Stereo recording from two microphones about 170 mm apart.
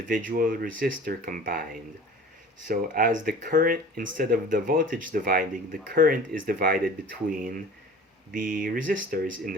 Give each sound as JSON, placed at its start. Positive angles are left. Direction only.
{"t": 0.1, "sound": "speech", "side_deg": -55}
{"t": 2.6, "sound": "speech", "side_deg": -50}